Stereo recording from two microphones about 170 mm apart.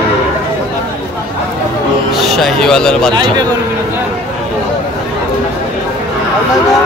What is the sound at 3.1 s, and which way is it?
Speech, 25° right (ahead or behind).